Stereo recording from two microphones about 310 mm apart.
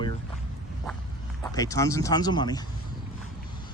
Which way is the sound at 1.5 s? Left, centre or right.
Centre.